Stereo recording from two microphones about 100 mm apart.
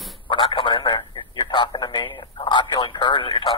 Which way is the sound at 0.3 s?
55° left (ahead or behind).